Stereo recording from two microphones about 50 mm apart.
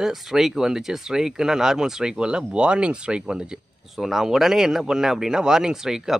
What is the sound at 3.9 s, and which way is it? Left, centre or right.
Speech, centre.